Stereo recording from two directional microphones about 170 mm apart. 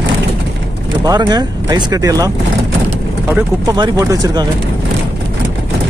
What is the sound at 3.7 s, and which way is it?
Speech, 20° right (ahead or behind).